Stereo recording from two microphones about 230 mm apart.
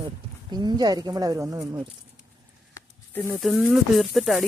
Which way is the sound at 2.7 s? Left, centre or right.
Centre.